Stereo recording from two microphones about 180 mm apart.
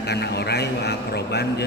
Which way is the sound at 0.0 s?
65° left (ahead or behind).